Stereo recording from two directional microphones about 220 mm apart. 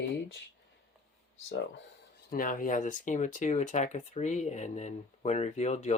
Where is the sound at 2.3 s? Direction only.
40° left (ahead or behind).